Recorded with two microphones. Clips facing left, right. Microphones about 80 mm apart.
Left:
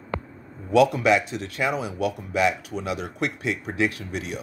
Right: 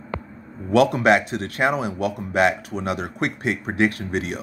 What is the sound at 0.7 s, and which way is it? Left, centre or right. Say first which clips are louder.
A man's voice: right 2 dB; right.